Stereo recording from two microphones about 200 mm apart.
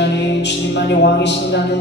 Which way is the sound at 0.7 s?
60° left (ahead or behind).